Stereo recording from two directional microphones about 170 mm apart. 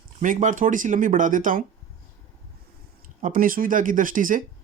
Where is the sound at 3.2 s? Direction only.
50° right (ahead or behind).